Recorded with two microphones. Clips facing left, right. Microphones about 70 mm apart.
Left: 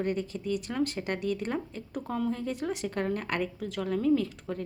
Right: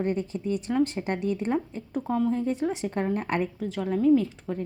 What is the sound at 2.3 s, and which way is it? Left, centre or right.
Speech, right.